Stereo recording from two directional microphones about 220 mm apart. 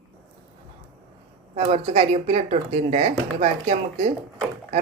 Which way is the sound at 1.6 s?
30° right (ahead or behind).